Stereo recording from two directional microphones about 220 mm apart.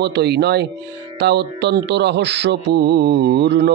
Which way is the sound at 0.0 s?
50° right (ahead or behind).